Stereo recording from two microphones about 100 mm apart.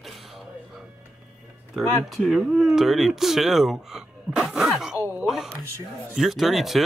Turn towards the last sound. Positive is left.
turn(degrees=0)  # may be behind; listen again after turning